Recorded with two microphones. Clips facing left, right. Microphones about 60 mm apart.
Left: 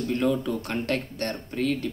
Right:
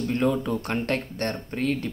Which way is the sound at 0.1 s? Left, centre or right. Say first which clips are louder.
Right 1 dB; right.